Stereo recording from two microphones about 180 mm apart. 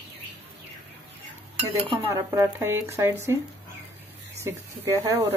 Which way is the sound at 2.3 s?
15° right (ahead or behind).